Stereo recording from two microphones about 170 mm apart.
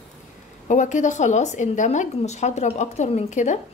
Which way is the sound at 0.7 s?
45° left (ahead or behind).